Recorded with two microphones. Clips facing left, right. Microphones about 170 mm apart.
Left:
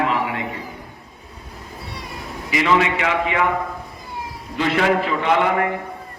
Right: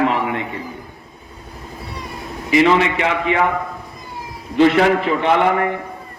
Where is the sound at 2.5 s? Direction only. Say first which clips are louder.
Right 4 dB; 30° right (ahead or behind).